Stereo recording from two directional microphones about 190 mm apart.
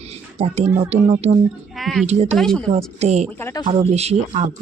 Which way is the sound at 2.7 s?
35° right (ahead or behind).